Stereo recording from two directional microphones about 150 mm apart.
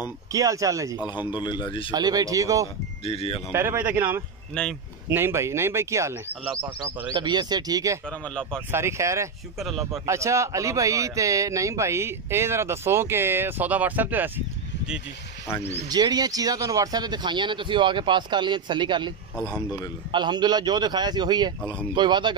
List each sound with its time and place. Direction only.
0.3 s a man's voice: 20° right (ahead or behind)
1.3 s speech: 30° left (ahead or behind)
1.9 s a man's voice: 25° right (ahead or behind)
3.1 s speech: 40° left (ahead or behind)
3.5 s speech: 15° right (ahead or behind)
4.6 s speech: 5° left (ahead or behind)
5.1 s speech: 15° right (ahead or behind)
7.2 s a man's voice: 30° right (ahead or behind)
9.6 s speech: centre (ahead or behind)
10.0 s speech: 20° right (ahead or behind)
15.9 s a man's voice: 25° right (ahead or behind)